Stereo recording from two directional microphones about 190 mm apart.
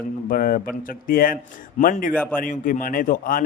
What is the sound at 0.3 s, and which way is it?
A man's voice, 50° left (ahead or behind).